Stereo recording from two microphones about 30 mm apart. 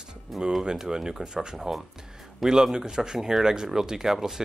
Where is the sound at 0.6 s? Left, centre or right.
Right.